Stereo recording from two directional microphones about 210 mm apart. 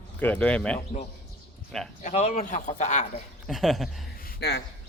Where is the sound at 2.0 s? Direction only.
30° left (ahead or behind).